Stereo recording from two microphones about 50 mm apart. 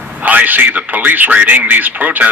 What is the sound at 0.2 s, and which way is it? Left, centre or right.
A man's voice, right.